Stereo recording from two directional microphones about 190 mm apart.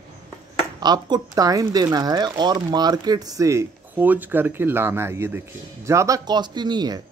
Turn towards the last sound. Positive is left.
turn(degrees=-20)  # may be behind; listen again after turning